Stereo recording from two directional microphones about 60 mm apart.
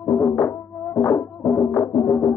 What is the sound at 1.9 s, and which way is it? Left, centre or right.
Music, left.